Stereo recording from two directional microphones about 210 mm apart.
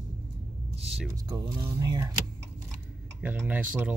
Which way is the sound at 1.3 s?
20° right (ahead or behind).